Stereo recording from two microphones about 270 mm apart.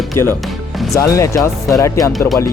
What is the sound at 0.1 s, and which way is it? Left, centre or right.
Speech, left.